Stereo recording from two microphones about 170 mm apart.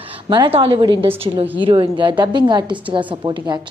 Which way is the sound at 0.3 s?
25° right (ahead or behind).